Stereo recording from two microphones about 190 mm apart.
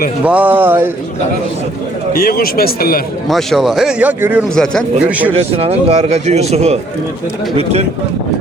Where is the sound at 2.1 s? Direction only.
50° left (ahead or behind).